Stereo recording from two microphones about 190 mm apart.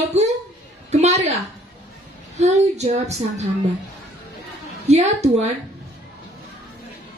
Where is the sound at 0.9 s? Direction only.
35° right (ahead or behind).